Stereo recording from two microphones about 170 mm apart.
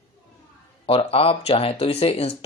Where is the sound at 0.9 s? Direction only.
35° left (ahead or behind).